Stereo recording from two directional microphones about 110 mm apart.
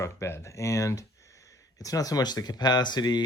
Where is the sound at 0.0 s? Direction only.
25° left (ahead or behind).